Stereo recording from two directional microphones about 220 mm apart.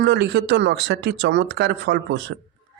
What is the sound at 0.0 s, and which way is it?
Speech, 50° right (ahead or behind).